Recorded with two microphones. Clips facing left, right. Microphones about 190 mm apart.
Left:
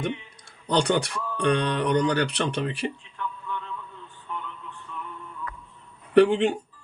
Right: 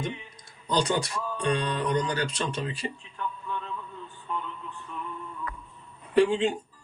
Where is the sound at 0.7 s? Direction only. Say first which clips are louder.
Left 3 dB; 65° left (ahead or behind).